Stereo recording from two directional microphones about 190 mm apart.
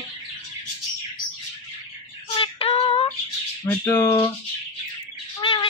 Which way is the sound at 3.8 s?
10° left (ahead or behind).